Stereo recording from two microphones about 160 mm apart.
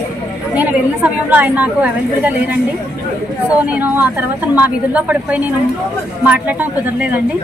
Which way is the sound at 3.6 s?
10° right (ahead or behind).